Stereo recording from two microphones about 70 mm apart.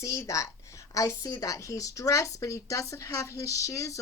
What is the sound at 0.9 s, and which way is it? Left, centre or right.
A woman's voice, left.